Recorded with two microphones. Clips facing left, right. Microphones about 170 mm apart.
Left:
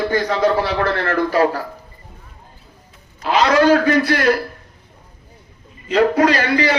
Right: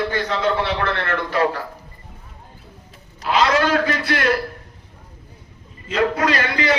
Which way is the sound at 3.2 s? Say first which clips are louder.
Left 5 dB; 35° left (ahead or behind).